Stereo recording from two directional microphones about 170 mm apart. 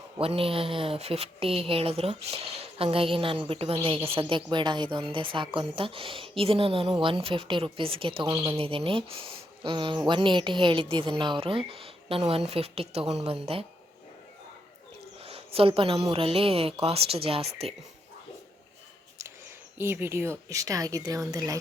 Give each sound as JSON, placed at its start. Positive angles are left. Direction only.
{"t": 0.2, "sound": "speech", "side_deg": -35}
{"t": 15.2, "sound": "a sound", "side_deg": -35}
{"t": 16.1, "sound": "speech", "side_deg": -35}
{"t": 19.8, "sound": "speech", "side_deg": -15}